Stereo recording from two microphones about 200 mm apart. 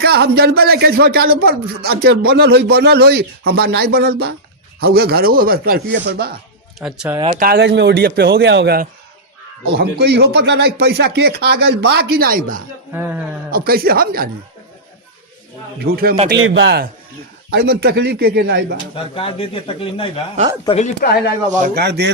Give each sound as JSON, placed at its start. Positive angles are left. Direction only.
{"t": 0.0, "sound": "a man's voice", "side_deg": -55}
{"t": 6.7, "sound": "speech", "side_deg": -5}
{"t": 7.3, "sound": "a man's voice", "side_deg": -50}
{"t": 12.9, "sound": "speech", "side_deg": -10}
{"t": 13.5, "sound": "a man's voice", "side_deg": -50}
{"t": 15.8, "sound": "a man's voice", "side_deg": -50}
{"t": 16.4, "sound": "a man's voice", "side_deg": -65}
{"t": 18.9, "sound": "speech", "side_deg": 25}
{"t": 21.8, "sound": "a man's voice", "side_deg": -55}